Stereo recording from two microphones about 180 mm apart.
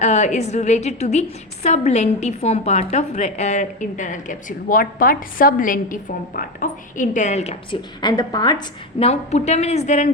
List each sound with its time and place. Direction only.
0.0 s a woman's voice: 40° left (ahead or behind)
8.0 s a woman's voice: 20° left (ahead or behind)
9.0 s a woman's voice: 35° left (ahead or behind)